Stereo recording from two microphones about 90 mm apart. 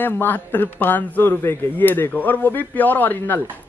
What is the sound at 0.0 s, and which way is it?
A man's voice, 20° left (ahead or behind).